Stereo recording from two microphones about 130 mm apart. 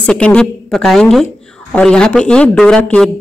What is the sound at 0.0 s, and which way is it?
A woman's voice, 10° left (ahead or behind).